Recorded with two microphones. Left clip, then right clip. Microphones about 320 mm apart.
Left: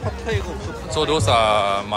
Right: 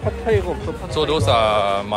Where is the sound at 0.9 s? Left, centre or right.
Centre.